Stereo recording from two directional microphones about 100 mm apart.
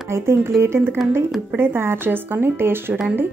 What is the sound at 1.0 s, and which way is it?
Speech, 5° right (ahead or behind).